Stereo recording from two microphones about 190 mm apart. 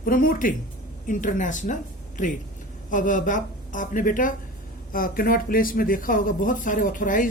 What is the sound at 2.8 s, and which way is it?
A woman's voice, 45° left (ahead or behind).